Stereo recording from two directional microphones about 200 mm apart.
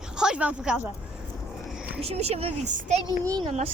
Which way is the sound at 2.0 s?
30° right (ahead or behind).